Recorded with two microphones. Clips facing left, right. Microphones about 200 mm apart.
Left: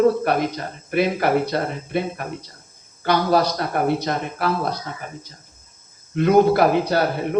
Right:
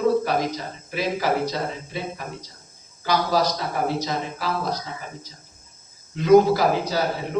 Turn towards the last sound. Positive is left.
turn(degrees=60)  # may be behind; listen again after turning